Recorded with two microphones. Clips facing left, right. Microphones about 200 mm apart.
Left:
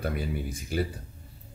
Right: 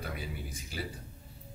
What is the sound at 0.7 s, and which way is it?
Speech, 55° left (ahead or behind).